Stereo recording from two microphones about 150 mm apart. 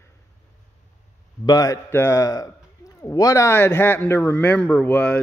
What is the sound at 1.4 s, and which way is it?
A man's voice, 25° left (ahead or behind).